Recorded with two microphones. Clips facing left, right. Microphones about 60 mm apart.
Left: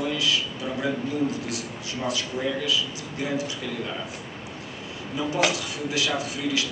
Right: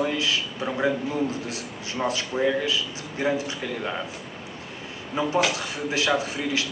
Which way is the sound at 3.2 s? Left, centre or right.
Right.